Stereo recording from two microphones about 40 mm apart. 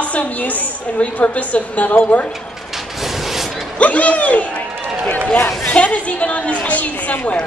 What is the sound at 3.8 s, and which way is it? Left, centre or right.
Speech, left.